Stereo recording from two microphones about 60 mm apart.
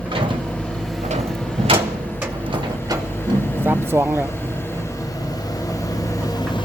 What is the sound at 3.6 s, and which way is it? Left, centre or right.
Speech, right.